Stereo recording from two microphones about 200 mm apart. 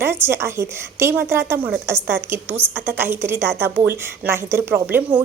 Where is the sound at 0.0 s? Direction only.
10° right (ahead or behind).